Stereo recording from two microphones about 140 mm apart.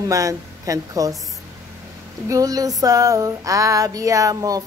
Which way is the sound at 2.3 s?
25° right (ahead or behind).